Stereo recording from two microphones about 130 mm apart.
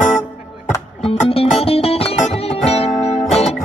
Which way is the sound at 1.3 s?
45° left (ahead or behind).